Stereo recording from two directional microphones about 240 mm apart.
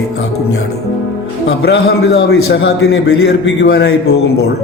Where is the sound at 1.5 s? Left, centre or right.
Left.